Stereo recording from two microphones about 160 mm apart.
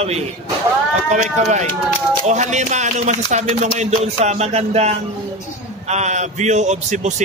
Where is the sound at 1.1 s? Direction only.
45° right (ahead or behind).